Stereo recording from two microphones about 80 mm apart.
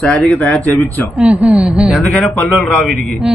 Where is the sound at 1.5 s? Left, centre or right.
Centre.